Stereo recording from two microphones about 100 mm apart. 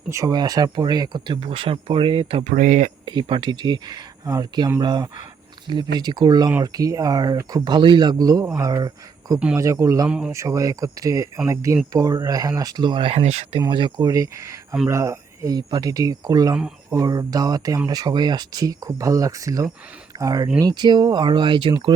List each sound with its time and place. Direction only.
0.1 s speech: 30° right (ahead or behind)
1.4 s speech: 65° right (ahead or behind); by 10.1 s 35° right (ahead or behind)
10.1 s speech: 10° right (ahead or behind)
10.3 s speech: 30° right (ahead or behind); by 13.1 s 50° right (ahead or behind)
13.1 s speech: 85° right
13.7 s speech: 55° right (ahead or behind)